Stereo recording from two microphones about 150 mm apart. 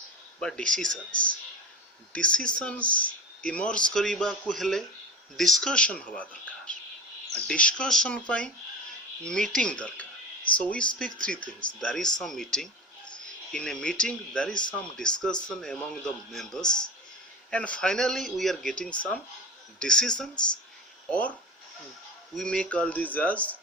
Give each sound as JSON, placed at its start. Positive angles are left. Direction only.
{"t": 0.3, "sound": "speech", "side_deg": 5}
{"t": 7.3, "sound": "speech", "side_deg": 5}
{"t": 14.5, "sound": "speech", "side_deg": 30}
{"t": 14.8, "sound": "speech", "side_deg": 5}
{"t": 22.4, "sound": "speech", "side_deg": 5}